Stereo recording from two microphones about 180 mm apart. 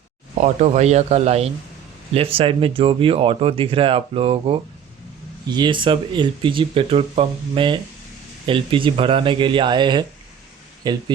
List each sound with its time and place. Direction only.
0.3 s speech: 40° right (ahead or behind); by 11.0 s 25° right (ahead or behind)